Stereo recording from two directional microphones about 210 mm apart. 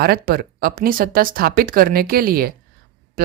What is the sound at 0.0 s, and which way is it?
Speech, 45° right (ahead or behind).